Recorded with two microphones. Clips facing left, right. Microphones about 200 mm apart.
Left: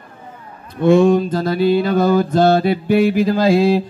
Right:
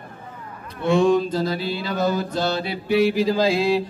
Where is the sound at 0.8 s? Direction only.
55° left (ahead or behind).